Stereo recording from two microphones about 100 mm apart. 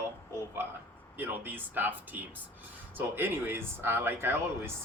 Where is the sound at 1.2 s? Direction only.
20° right (ahead or behind).